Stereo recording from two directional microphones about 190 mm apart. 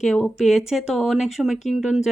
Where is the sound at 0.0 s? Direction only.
Centre (ahead or behind).